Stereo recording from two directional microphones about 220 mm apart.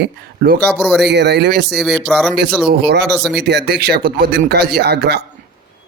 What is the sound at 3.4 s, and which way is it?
Speech, 50° right (ahead or behind).